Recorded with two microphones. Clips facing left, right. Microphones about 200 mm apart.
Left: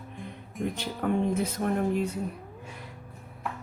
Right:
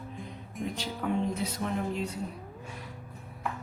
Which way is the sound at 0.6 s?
55° left (ahead or behind).